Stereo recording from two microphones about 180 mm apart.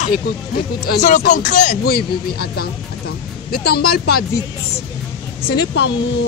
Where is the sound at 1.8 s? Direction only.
60° left (ahead or behind).